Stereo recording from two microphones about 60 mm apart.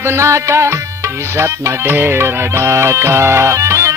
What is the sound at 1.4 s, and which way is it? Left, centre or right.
Music, right.